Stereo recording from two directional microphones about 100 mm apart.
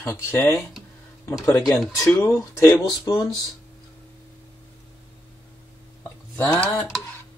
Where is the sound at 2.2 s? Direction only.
20° left (ahead or behind).